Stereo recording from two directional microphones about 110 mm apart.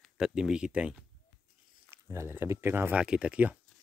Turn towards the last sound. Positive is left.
turn(degrees=-10)  # may be behind; listen again after turning